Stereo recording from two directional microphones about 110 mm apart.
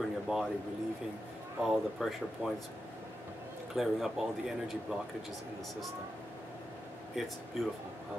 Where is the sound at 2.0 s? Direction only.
Centre (ahead or behind).